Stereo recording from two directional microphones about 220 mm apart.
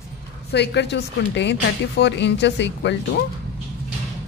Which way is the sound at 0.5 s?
50° left (ahead or behind).